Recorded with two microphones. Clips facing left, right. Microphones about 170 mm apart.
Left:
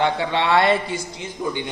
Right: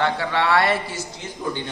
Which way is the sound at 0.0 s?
20° left (ahead or behind).